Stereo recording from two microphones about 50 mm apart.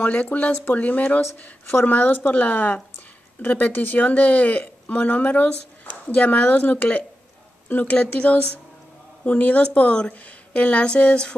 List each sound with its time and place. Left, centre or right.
0.0 s a woman's voice: left